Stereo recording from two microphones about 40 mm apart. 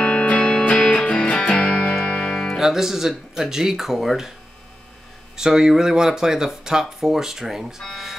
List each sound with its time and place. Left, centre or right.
0.0 s music: left
2.6 s speech: centre
5.3 s speech: centre